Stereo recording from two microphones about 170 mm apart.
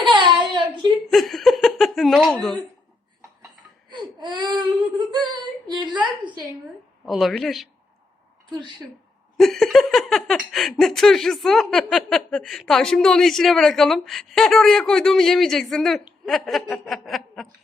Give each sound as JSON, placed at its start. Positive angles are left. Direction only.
{"t": 0.0, "sound": "child singing", "side_deg": -30}
{"t": 1.1, "sound": "a sound", "side_deg": 0}
{"t": 3.9, "sound": "baby cry", "side_deg": -25}
{"t": 7.0, "sound": "speech", "side_deg": 0}
{"t": 9.4, "sound": "speech", "side_deg": 0}